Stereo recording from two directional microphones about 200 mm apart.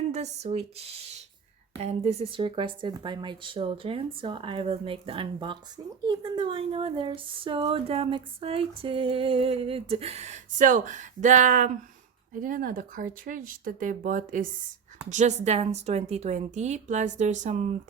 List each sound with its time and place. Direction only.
0.1 s a woman's voice: 35° right (ahead or behind)